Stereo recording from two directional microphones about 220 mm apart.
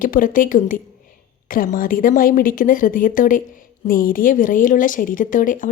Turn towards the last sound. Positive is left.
turn(degrees=35)  # may be behind; listen again after turning